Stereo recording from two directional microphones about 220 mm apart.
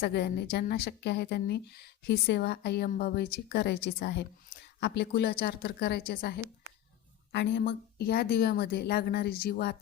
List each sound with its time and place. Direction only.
0.0 s a woman's voice: 45° left (ahead or behind)